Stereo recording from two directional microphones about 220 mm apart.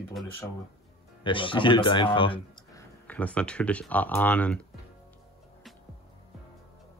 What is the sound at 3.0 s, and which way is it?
Speech, 5° left (ahead or behind).